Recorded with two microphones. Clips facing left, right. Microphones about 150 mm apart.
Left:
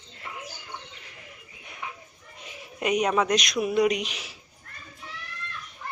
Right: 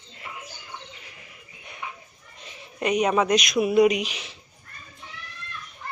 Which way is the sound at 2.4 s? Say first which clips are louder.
Right 2 dB; 5° left (ahead or behind).